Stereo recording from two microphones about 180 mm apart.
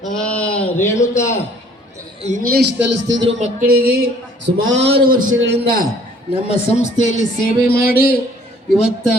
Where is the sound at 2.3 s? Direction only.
50° right (ahead or behind).